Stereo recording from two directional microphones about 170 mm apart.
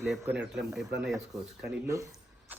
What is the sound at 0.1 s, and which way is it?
Speech, 5° right (ahead or behind).